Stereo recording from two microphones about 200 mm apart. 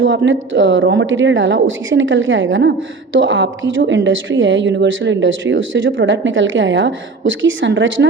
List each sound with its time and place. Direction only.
0.0 s a woman's voice: 70° right (ahead or behind)